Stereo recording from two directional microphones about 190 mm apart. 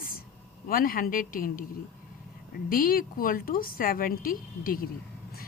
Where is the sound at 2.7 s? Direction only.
50° left (ahead or behind).